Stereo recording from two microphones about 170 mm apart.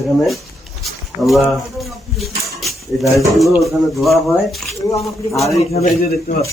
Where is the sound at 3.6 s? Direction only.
Centre (ahead or behind).